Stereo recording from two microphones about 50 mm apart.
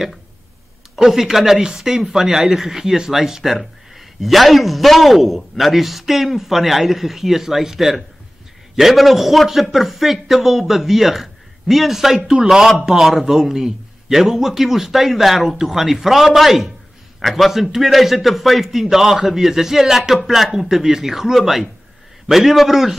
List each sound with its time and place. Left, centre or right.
0.9 s a man's voice: centre
12.2 s speech: centre
12.4 s a man's voice: centre